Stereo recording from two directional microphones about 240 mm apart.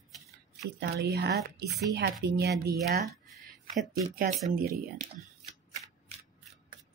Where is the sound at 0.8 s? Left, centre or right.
Right.